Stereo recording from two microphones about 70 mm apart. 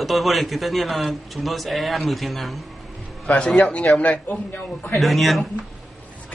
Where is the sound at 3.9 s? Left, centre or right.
Centre.